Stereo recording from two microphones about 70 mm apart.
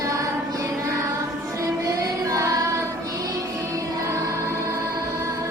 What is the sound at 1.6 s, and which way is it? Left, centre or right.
Music, right.